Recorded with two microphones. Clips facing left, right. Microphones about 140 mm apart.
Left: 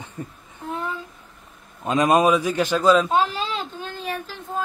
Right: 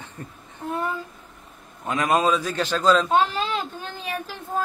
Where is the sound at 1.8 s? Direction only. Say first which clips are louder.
Left 4 dB; 20° left (ahead or behind).